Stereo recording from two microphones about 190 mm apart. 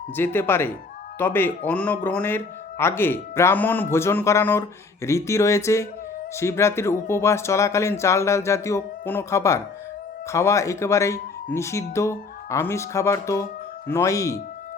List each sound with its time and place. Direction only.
0.2 s speech: 10° left (ahead or behind)